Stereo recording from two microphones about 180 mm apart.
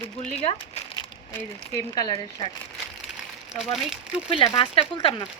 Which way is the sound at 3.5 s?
Centre (ahead or behind).